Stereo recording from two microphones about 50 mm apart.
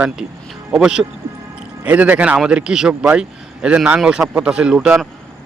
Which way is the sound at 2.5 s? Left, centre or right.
Centre.